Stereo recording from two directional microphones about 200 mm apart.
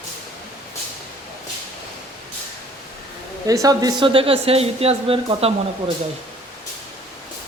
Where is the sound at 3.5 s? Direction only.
20° right (ahead or behind).